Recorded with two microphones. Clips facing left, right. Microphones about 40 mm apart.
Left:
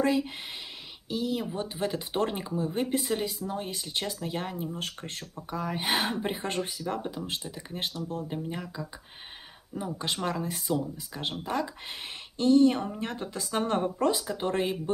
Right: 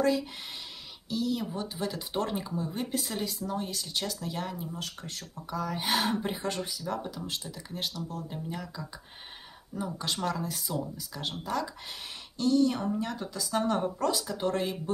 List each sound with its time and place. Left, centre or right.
0.0 s speech: left
3.0 s speech: centre; by 6.7 s left
7.0 s speech: left